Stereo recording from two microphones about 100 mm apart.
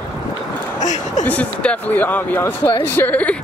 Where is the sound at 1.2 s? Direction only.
15° left (ahead or behind).